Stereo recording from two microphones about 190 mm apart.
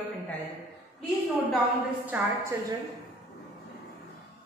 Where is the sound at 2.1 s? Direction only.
10° right (ahead or behind).